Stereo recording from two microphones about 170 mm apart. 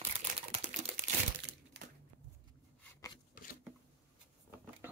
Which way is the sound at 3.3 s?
55° left (ahead or behind).